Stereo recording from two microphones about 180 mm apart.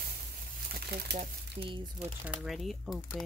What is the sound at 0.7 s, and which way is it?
Crumpling, 65° right (ahead or behind).